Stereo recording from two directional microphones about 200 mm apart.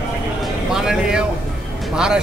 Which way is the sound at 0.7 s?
5° right (ahead or behind).